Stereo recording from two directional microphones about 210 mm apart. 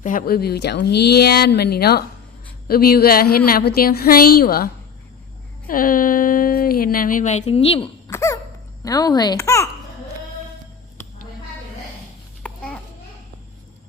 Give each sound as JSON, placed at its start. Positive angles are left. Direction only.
{"t": 0.0, "sound": "speech", "side_deg": 40}
{"t": 8.1, "sound": "cough", "side_deg": 15}
{"t": 8.8, "sound": "speech", "side_deg": 15}
{"t": 12.4, "sound": "babbling", "side_deg": 5}